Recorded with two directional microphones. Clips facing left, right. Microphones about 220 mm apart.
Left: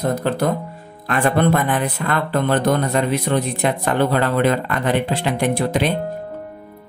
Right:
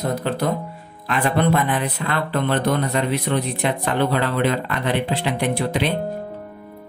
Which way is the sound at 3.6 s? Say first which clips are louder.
Left 2 dB; 45° left (ahead or behind).